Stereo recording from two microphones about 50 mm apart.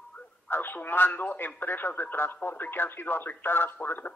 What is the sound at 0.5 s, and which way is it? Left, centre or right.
Speech, left.